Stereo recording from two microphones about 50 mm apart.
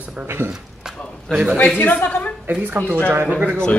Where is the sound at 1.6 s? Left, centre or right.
Left.